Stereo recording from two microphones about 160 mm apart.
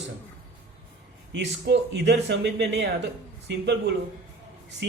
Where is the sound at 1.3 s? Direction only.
90° right.